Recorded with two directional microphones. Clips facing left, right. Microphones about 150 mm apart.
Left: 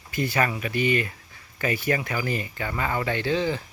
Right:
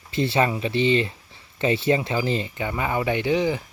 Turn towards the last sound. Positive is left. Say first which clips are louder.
# right 3 dB
turn(degrees=-15)  # may be behind; listen again after turning